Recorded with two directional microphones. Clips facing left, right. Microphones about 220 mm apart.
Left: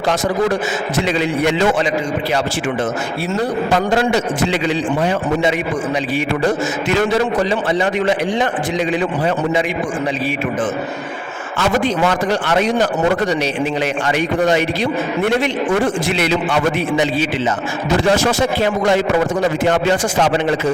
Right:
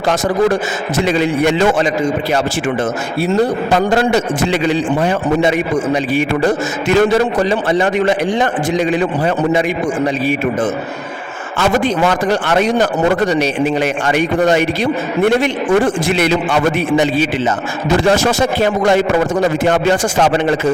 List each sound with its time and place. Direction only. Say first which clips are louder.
1.0 s a man's voice: right 4 dB; 50° right (ahead or behind)
3.9 s a man's voice: right 2 dB; 50° right (ahead or behind)
7.7 s a man's voice: right 3 dB; 50° right (ahead or behind)
12.3 s a man's voice: right 2 dB; 50° right (ahead or behind)
14.1 s a man's voice: right 3 dB; 50° right (ahead or behind)
18.1 s a man's voice: right 2 dB; 45° right (ahead or behind)